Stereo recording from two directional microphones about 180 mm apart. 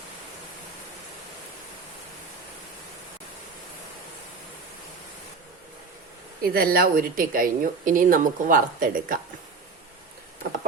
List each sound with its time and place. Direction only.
6.4 s a woman's voice: 55° right (ahead or behind)